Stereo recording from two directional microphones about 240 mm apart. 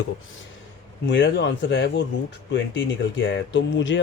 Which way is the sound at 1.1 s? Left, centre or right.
Left.